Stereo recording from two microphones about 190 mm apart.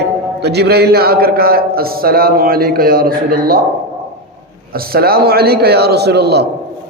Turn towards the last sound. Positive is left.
turn(degrees=-60)  # may be behind; listen again after turning